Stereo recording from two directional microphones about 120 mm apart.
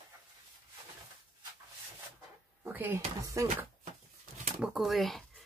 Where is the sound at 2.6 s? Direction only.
20° right (ahead or behind).